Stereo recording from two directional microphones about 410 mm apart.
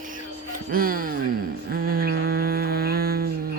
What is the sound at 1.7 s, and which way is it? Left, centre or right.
Humming, right.